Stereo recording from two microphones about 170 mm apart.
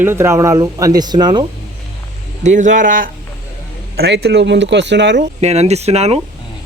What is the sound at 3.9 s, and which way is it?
Speech, 75° right (ahead or behind).